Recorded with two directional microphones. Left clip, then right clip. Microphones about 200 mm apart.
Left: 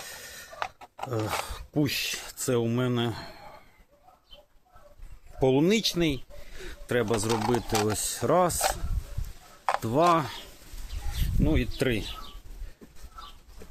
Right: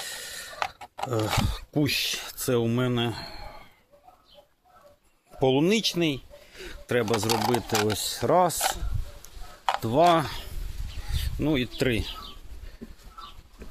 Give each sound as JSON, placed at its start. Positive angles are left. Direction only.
{"t": 0.0, "sound": "a sound", "side_deg": -40}
{"t": 1.5, "sound": "speech", "side_deg": -25}
{"t": 5.4, "sound": "a sound", "side_deg": -10}
{"t": 7.3, "sound": "speech", "side_deg": -55}
{"t": 7.9, "sound": "speech", "side_deg": -10}
{"t": 9.8, "sound": "speech", "side_deg": -10}
{"t": 10.2, "sound": "a man's voice", "side_deg": -30}